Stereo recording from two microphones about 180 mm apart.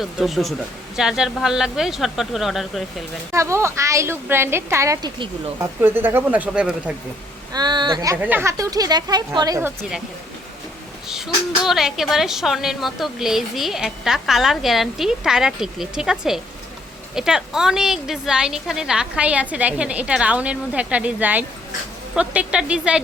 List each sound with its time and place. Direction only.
0.0 s a woman's voice: centre (ahead or behind)
3.3 s a woman's voice: 15° right (ahead or behind)
7.5 s speech: 25° right (ahead or behind)
8.1 s speech: 10° right (ahead or behind)
11.6 s a woman's voice: centre (ahead or behind)